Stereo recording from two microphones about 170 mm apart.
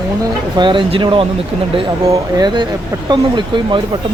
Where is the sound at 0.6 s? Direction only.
30° right (ahead or behind).